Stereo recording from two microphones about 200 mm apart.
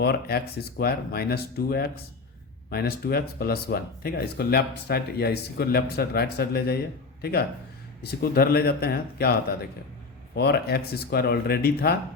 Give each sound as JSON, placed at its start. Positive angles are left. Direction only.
{"t": 0.0, "sound": "speech", "side_deg": 50}